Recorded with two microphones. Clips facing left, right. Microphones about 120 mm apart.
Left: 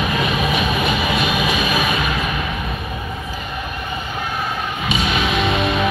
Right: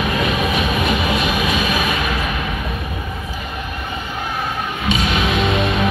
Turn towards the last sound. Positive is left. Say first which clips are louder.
# right 1 dB
turn(degrees=0)  # may be behind; listen again after turning